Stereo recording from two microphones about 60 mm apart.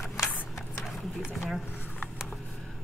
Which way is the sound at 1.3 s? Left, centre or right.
Centre.